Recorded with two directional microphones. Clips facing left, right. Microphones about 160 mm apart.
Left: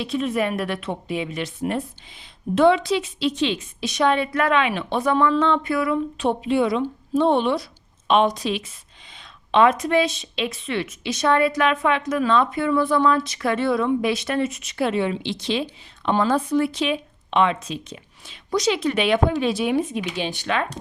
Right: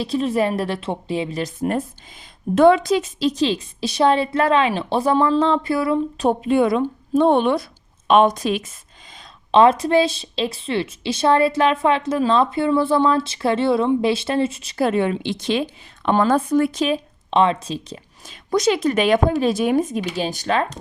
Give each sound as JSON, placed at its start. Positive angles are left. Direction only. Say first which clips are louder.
{"t": 0.0, "sound": "a woman's voice", "louder": "right 3 dB", "side_deg": -35}
{"t": 9.5, "sound": "a woman's voice", "louder": "right 3 dB", "side_deg": -30}
{"t": 18.5, "sound": "a woman's voice", "louder": "right 3 dB", "side_deg": -50}